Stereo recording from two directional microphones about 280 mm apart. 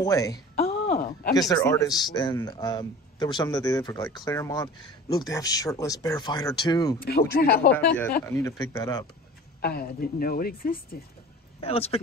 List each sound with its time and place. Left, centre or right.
0.0 s speech: centre
0.8 s a sound: left
1.5 s a man's voice: centre
7.1 s speech: left
8.3 s a man's voice: centre
9.6 s speech: left
11.6 s speech: left